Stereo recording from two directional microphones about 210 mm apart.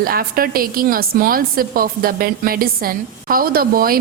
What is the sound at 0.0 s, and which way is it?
A woman's voice, 45° right (ahead or behind).